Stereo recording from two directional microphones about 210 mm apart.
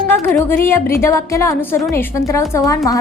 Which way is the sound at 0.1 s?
10° left (ahead or behind).